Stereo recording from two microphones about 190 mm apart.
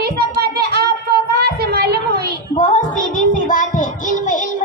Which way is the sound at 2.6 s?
40° left (ahead or behind).